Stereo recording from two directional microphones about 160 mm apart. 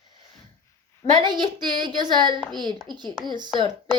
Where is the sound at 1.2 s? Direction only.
30° right (ahead or behind).